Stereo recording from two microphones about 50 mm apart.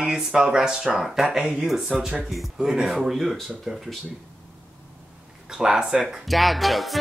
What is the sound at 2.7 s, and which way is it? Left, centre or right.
Speech, centre.